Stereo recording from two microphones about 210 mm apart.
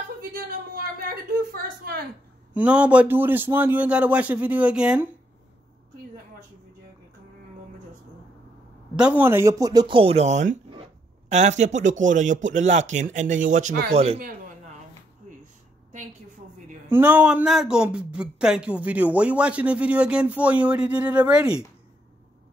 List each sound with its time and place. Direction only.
0.3 s a sound: 45° right (ahead or behind)
2.5 s a man's voice: 5° right (ahead or behind)
8.9 s a man's voice: 5° right (ahead or behind); by 14.2 s 30° right (ahead or behind)
16.9 s speech: 10° right (ahead or behind)